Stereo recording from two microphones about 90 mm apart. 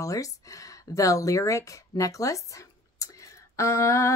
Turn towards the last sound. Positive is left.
turn(degrees=35)  # may be behind; listen again after turning